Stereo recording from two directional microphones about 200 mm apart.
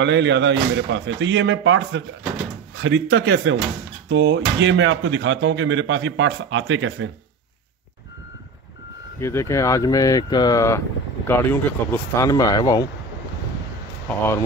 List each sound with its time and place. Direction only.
0.0 s speech: 60° right (ahead or behind)
9.2 s speech: 15° left (ahead or behind)
14.0 s speech: 10° left (ahead or behind)